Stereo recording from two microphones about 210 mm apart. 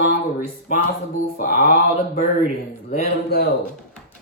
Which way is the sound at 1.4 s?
40° left (ahead or behind).